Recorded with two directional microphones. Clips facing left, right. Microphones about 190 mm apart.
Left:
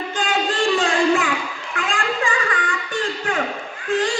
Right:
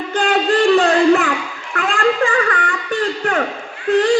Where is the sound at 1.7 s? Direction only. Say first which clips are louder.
Right 7 dB; 60° right (ahead or behind).